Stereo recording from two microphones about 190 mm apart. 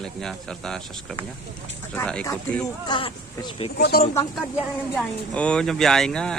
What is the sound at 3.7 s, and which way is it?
Speech, 55° left (ahead or behind).